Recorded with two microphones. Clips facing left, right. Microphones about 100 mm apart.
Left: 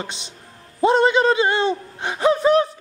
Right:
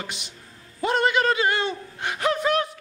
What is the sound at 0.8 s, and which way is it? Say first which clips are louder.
Gasp: left 6 dB; 25° left (ahead or behind).